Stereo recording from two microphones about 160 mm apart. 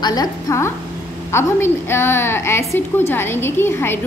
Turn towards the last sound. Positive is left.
turn(degrees=15)  # may be behind; listen again after turning